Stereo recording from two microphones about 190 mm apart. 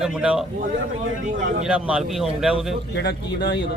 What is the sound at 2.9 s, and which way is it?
Speech, 65° left (ahead or behind).